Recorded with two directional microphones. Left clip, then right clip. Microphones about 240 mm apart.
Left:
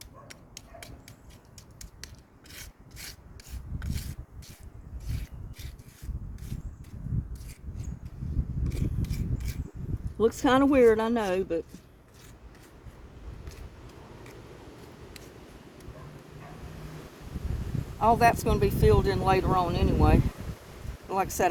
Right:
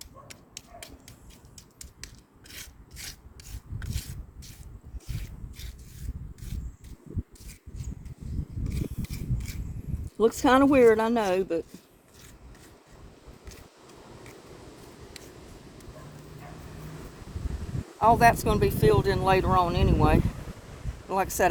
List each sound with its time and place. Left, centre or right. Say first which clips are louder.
0.0 s dog: right 1 dB; centre
2.5 s wood: right 2 dB; centre
3.8 s a sound: even; centre
5.0 s rub: even; centre
8.7 s mechanisms: even; centre
10.2 s speech: right 2 dB; centre
18.0 s speech: right 2 dB; centre